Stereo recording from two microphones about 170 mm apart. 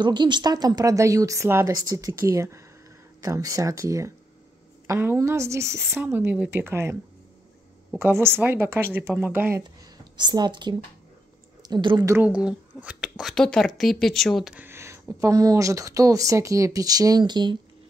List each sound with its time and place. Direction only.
0.0 s a woman's voice: 25° right (ahead or behind)
8.0 s speech: 15° right (ahead or behind)
10.1 s a woman's voice: 25° right (ahead or behind)
12.1 s speech: 10° right (ahead or behind); by 17.6 s 25° right (ahead or behind)